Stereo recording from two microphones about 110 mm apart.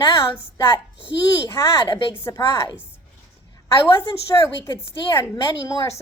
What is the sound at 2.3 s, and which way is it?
Speech, 35° left (ahead or behind).